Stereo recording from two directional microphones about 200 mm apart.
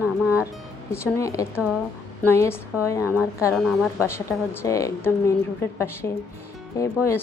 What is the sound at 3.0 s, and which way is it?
A woman's voice, 10° right (ahead or behind).